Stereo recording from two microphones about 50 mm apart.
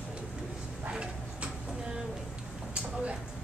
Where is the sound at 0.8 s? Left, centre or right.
Right.